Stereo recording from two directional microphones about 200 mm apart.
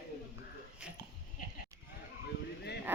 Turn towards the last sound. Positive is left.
turn(degrees=-10)  # may be behind; listen again after turning